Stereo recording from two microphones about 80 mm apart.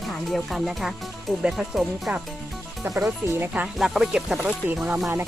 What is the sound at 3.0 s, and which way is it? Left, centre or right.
Speech, right.